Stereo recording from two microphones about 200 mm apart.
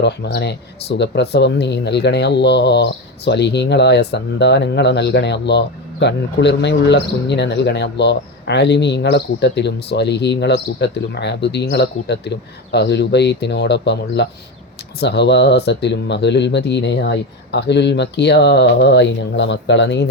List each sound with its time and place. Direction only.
0.0 s speech: 55° left (ahead or behind)